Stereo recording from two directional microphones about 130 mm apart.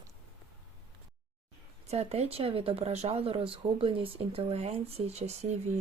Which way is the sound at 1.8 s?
55° right (ahead or behind).